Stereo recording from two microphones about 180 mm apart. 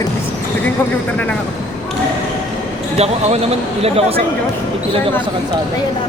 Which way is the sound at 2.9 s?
35° right (ahead or behind).